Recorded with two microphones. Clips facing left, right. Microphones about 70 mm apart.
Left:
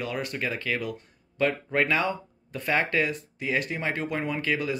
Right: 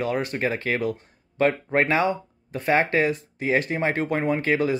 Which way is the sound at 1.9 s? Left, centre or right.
Right.